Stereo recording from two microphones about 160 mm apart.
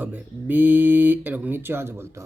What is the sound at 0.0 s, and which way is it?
A man's voice, 10° right (ahead or behind).